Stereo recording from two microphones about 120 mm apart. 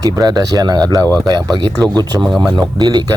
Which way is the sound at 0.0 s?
35° right (ahead or behind).